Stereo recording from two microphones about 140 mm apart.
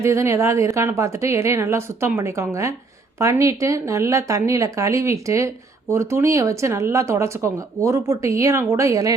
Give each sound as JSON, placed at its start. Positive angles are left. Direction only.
{"t": 0.0, "sound": "speech", "side_deg": -20}